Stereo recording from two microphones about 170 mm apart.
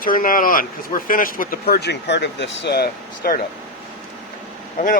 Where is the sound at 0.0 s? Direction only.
55° left (ahead or behind).